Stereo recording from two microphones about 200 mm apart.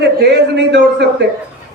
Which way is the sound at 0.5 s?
60° right (ahead or behind).